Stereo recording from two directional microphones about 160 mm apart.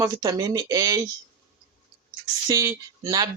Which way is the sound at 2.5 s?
20° right (ahead or behind).